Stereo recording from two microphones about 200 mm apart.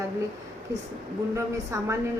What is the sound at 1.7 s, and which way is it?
Speech, 15° right (ahead or behind).